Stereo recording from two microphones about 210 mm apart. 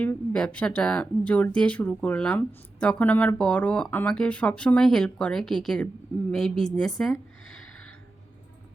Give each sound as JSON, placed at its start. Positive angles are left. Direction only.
{"t": 0.0, "sound": "speech", "side_deg": 5}